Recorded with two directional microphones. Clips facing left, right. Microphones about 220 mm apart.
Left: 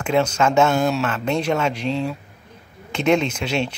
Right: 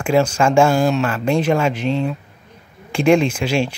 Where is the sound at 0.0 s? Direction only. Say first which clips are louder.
Right 3 dB; 10° right (ahead or behind).